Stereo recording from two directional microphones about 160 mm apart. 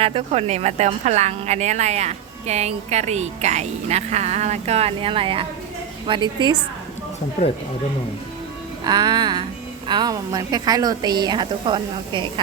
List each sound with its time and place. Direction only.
0.0 s a woman's voice: 40° right (ahead or behind)
8.8 s a woman's voice: 25° right (ahead or behind)